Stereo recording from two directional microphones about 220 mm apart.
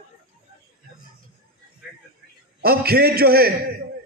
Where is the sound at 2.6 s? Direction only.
45° right (ahead or behind).